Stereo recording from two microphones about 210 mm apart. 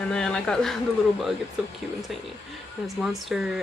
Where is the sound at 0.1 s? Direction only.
5° left (ahead or behind).